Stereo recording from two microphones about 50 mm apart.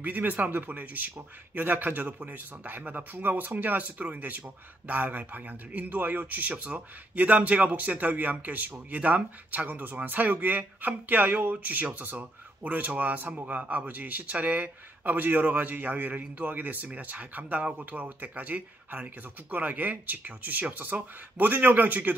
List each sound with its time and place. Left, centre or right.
0.0 s speech: right